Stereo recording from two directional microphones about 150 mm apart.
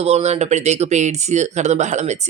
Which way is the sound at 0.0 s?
45° right (ahead or behind).